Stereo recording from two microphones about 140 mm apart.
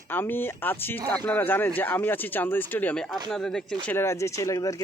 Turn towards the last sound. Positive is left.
turn(degrees=25)  # may be behind; listen again after turning